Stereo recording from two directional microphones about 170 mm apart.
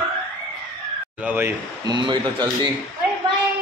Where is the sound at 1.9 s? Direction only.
25° right (ahead or behind).